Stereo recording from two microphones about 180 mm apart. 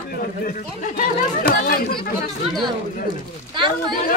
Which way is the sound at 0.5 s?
55° left (ahead or behind).